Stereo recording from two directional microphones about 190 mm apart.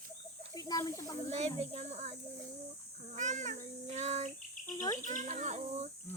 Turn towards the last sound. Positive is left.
turn(degrees=-35)  # may be behind; listen again after turning